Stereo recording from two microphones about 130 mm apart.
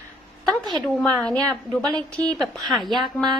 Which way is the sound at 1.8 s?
35° right (ahead or behind).